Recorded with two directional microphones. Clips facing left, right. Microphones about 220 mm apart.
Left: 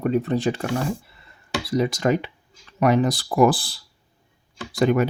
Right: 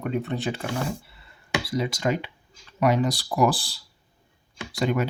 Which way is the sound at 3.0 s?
50° left (ahead or behind).